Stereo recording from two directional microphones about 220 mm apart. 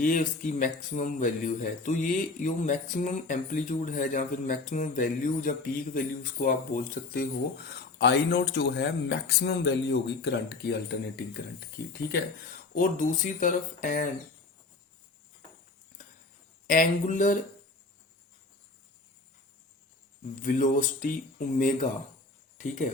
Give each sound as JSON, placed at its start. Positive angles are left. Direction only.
{"t": 0.0, "sound": "a man's voice", "side_deg": 35}
{"t": 12.7, "sound": "a man's voice", "side_deg": 40}
{"t": 16.6, "sound": "a man's voice", "side_deg": 35}
{"t": 20.4, "sound": "a man's voice", "side_deg": 35}